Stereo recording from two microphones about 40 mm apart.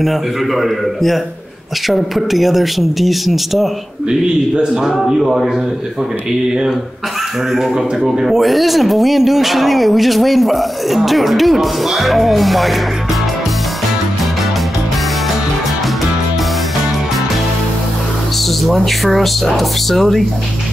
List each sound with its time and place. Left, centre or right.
0.0 s speech: centre
4.1 s speech: centre
7.5 s speech: centre
8.4 s speech: centre
18.6 s speech: centre